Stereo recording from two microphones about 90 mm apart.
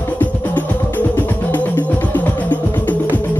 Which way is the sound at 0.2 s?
20° left (ahead or behind).